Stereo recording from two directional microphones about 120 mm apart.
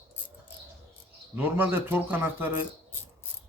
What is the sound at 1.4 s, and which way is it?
Speech, 15° right (ahead or behind).